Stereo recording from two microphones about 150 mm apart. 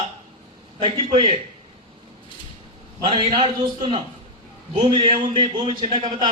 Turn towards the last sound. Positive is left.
turn(degrees=-35)  # may be behind; listen again after turning